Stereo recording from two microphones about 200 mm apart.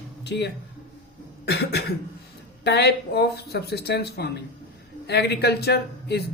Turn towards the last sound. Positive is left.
turn(degrees=55)  # may be behind; listen again after turning